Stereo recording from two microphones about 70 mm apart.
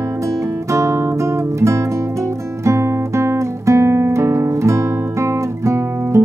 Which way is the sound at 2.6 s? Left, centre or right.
Right.